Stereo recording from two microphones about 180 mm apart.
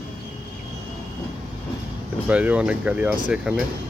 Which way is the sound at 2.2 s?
5° right (ahead or behind).